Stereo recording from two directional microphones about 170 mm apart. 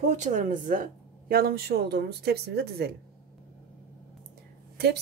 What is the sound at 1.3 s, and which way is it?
Speech, 60° right (ahead or behind).